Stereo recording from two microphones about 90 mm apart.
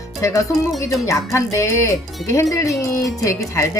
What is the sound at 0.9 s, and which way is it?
Speech, 35° left (ahead or behind).